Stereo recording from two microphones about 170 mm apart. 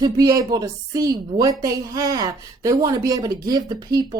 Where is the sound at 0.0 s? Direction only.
20° right (ahead or behind).